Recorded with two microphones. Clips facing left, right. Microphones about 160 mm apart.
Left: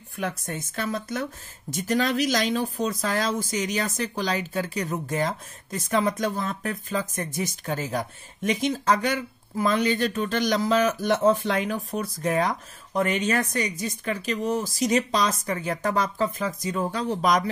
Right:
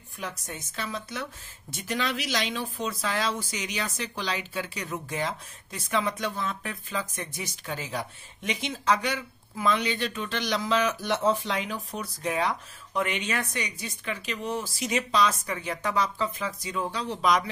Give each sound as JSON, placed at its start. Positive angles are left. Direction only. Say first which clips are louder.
{"t": 0.2, "sound": "speech", "louder": "left 7 dB", "side_deg": 50}